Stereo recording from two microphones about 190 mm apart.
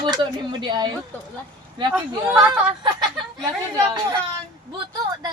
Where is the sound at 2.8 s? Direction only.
20° right (ahead or behind).